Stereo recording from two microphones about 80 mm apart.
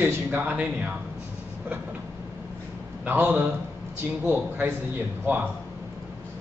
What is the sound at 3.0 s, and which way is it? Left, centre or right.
A man's voice, right.